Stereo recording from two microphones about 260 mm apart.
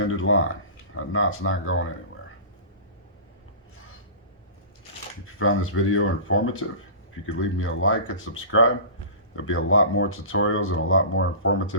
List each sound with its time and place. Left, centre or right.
0.0 s speech: left
5.4 s speech: left